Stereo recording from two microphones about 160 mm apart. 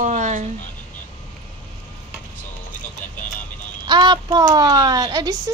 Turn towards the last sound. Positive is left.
turn(degrees=-25)  # may be behind; listen again after turning